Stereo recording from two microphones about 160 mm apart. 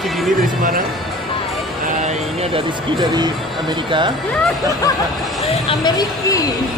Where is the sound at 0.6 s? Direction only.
60° right (ahead or behind).